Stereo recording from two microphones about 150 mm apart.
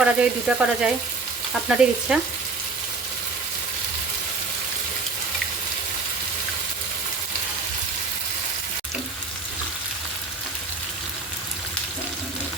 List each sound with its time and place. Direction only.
0.0 s frying: 5° right (ahead or behind)
1.6 s stir: 5° right (ahead or behind)